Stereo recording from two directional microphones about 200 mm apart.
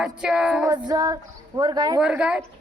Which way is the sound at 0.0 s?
5° right (ahead or behind).